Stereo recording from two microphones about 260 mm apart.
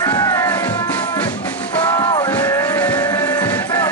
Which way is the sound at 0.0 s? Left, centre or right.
Centre.